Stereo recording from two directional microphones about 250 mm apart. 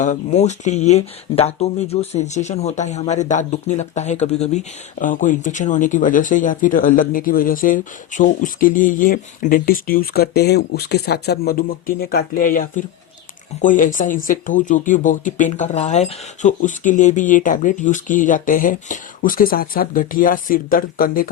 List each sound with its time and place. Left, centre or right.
0.0 s speech: left